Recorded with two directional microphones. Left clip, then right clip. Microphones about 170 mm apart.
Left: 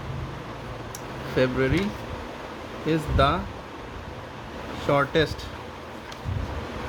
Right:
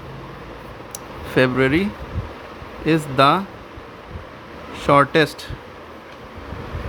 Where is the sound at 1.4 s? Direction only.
35° right (ahead or behind).